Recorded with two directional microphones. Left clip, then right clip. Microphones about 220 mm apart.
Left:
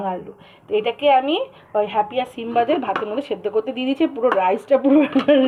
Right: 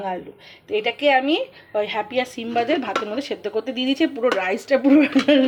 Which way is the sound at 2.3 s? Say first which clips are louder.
Left 5 dB; 10° right (ahead or behind).